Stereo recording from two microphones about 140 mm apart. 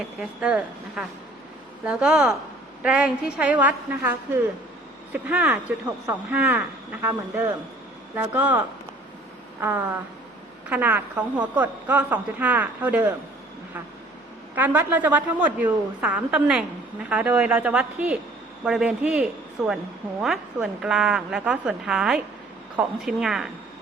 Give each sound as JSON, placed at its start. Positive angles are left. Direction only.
{"t": 0.2, "sound": "a woman's voice", "side_deg": -5}
{"t": 9.6, "sound": "speech", "side_deg": -15}
{"t": 14.5, "sound": "a woman's voice", "side_deg": -15}